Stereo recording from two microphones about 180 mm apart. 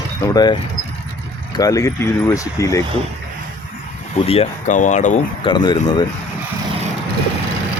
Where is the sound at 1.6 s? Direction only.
20° left (ahead or behind).